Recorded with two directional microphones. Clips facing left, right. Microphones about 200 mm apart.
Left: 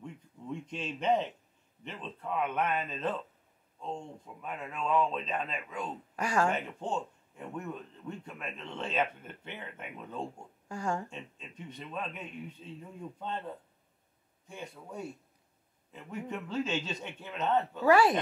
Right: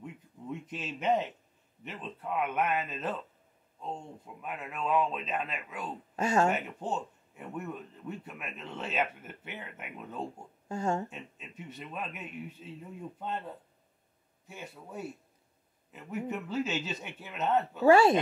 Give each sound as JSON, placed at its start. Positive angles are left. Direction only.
{"t": 0.0, "sound": "a sound", "side_deg": -5}
{"t": 1.9, "sound": "speech", "side_deg": -5}
{"t": 6.1, "sound": "speech", "side_deg": -25}
{"t": 6.5, "sound": "speech", "side_deg": -5}
{"t": 10.7, "sound": "speech", "side_deg": -25}
{"t": 11.1, "sound": "speech", "side_deg": -5}
{"t": 14.5, "sound": "speech", "side_deg": -5}
{"t": 17.8, "sound": "speech", "side_deg": -25}